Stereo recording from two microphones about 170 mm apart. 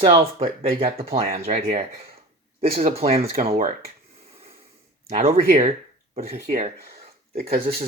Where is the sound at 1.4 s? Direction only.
60° right (ahead or behind).